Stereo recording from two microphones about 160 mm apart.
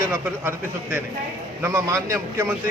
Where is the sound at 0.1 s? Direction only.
15° right (ahead or behind).